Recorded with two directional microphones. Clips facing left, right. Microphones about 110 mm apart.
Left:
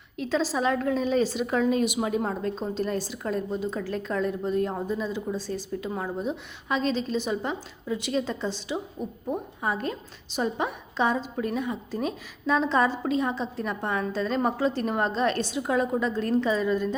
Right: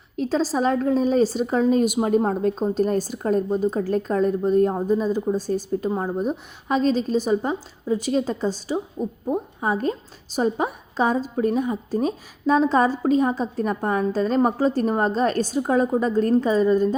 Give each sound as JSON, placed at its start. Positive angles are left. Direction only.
{"t": 0.2, "sound": "a woman's voice", "side_deg": -40}